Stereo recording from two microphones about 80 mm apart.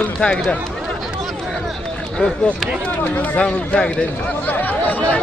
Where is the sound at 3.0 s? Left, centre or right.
Centre.